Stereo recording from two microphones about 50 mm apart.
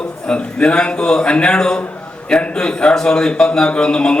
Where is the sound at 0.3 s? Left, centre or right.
Centre.